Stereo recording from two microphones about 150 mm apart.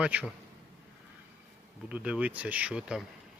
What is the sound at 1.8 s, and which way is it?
Speech, 10° right (ahead or behind).